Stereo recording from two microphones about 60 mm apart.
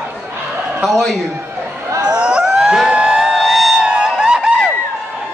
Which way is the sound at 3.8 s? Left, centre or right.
Centre.